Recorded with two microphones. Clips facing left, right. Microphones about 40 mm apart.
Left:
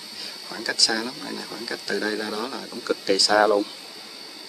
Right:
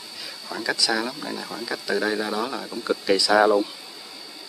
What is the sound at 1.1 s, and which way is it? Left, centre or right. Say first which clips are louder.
Speech: right 2 dB; right.